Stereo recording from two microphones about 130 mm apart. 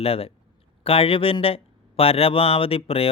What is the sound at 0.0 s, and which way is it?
Speech, 50° left (ahead or behind).